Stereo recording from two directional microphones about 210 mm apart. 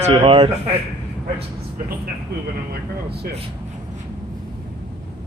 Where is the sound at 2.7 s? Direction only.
50° right (ahead or behind).